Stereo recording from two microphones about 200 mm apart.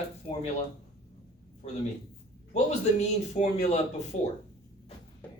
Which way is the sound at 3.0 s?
35° left (ahead or behind).